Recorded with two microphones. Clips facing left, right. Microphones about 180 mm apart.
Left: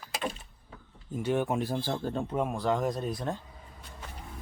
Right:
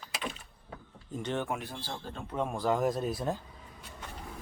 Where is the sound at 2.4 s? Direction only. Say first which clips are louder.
Right 1 dB; centre (ahead or behind).